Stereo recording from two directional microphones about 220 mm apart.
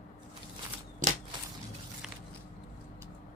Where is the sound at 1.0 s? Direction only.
35° right (ahead or behind).